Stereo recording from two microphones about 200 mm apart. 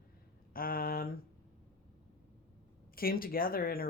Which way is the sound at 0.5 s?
45° left (ahead or behind).